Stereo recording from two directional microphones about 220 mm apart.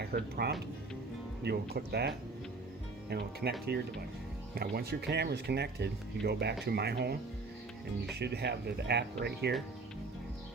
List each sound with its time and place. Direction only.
0.0 s speech: 45° right (ahead or behind)